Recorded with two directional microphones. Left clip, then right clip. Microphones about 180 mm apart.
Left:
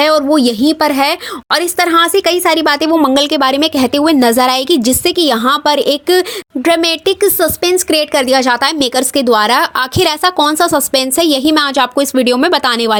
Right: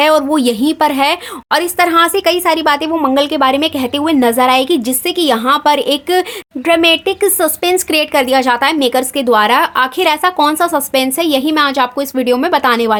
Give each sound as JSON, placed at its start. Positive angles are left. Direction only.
{"t": 0.0, "sound": "speech", "side_deg": 15}